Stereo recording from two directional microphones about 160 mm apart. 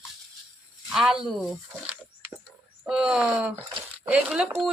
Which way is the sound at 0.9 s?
Centre (ahead or behind).